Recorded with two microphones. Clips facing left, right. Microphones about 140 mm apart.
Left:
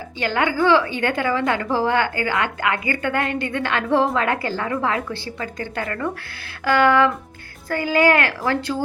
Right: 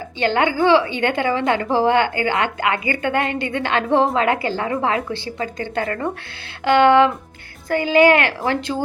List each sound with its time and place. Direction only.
0.2 s a woman's voice: 25° right (ahead or behind)